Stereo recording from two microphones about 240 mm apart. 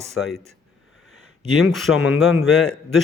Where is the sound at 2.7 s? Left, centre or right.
Centre.